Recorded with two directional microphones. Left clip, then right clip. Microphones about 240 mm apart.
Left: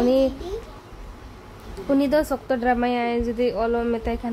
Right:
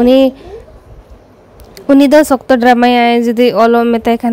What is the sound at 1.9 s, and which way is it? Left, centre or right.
Speech, right.